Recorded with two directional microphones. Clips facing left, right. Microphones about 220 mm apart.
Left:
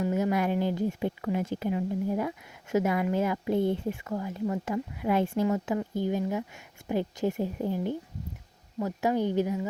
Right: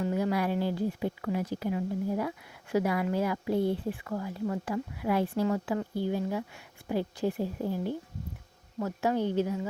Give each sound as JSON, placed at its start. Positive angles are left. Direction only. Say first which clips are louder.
{"t": 0.0, "sound": "a woman's voice", "louder": "left 2 dB", "side_deg": 20}